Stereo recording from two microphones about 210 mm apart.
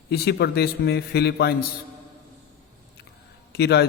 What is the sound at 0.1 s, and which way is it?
A man's voice, 50° left (ahead or behind).